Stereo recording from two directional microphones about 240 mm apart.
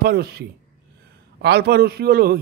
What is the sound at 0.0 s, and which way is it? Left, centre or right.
A man's voice, right.